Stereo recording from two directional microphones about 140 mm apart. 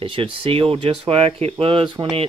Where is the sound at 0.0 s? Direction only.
40° right (ahead or behind).